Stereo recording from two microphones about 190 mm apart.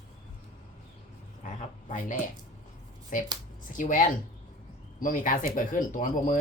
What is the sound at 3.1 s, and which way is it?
Speech, 45° left (ahead or behind).